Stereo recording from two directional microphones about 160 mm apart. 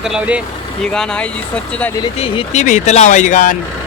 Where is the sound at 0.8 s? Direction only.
5° left (ahead or behind).